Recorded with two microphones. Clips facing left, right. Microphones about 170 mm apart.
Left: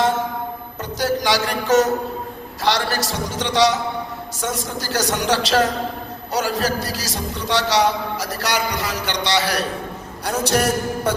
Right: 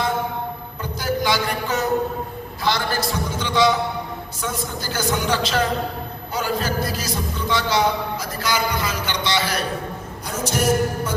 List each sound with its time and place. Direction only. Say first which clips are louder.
0.9 s music: left 2 dB; 80° left
2.6 s a man's voice: left 2 dB; 80° left